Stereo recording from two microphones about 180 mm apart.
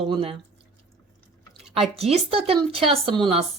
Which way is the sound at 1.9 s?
35° right (ahead or behind).